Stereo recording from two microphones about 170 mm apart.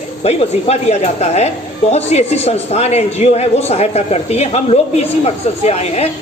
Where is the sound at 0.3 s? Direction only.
40° left (ahead or behind).